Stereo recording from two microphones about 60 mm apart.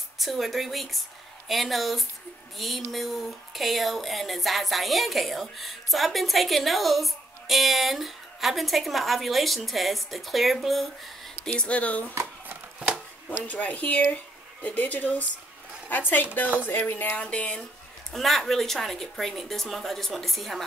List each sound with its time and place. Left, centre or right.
0.2 s speech: centre
11.5 s speech: left
12.7 s chopping: centre
13.5 s speech: left
17.2 s speech: centre
18.1 s speech: centre